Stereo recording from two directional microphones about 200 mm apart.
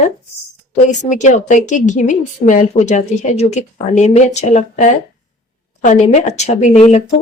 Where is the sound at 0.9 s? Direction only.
35° left (ahead or behind).